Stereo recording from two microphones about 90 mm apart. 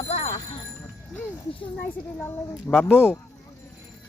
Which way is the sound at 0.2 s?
90° left.